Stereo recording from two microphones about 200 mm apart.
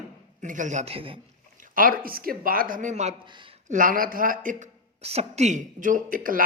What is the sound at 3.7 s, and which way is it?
A man's voice, 45° right (ahead or behind).